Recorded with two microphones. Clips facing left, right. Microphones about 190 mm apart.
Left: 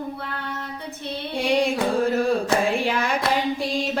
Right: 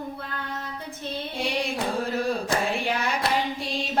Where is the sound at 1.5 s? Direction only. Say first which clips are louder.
Left 9 dB; 55° left (ahead or behind).